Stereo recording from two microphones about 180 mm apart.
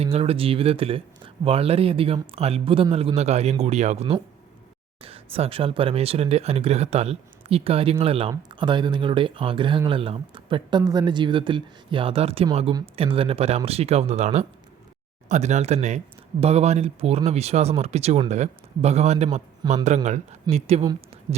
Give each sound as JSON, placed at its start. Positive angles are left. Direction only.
{"t": 0.0, "sound": "speech", "side_deg": -35}